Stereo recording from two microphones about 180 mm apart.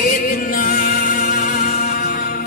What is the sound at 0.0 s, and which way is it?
Music, 50° left (ahead or behind).